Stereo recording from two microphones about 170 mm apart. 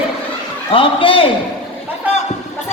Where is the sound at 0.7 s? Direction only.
30° left (ahead or behind).